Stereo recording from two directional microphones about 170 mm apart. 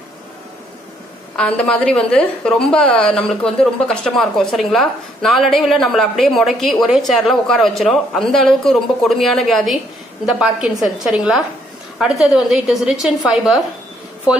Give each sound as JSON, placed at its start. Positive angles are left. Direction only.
{"t": 1.3, "sound": "a woman's voice", "side_deg": 5}